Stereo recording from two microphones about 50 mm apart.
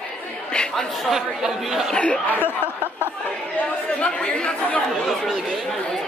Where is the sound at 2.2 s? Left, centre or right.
Left.